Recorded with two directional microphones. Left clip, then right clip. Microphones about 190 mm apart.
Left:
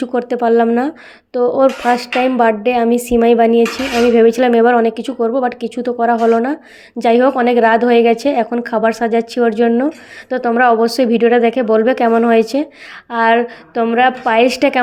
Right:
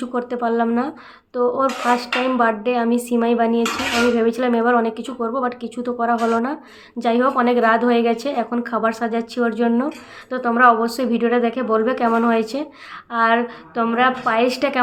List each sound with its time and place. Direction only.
0.0 s speech: 35° left (ahead or behind)